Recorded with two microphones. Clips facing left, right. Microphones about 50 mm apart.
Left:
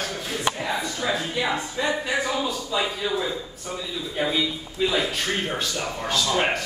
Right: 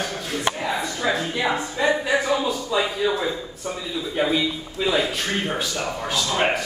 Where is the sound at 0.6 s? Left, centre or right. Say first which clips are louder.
Right 2 dB; centre.